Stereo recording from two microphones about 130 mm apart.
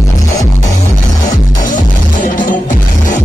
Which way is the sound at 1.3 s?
85° left.